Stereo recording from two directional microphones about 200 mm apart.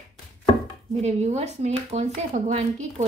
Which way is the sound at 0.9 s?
35° right (ahead or behind).